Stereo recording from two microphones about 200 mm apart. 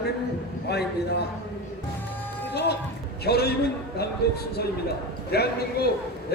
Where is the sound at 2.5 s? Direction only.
55° left (ahead or behind).